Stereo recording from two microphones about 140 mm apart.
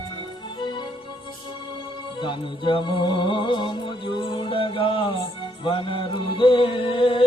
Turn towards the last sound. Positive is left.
turn(degrees=35)  # may be behind; listen again after turning